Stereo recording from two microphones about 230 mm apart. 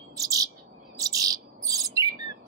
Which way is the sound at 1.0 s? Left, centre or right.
Centre.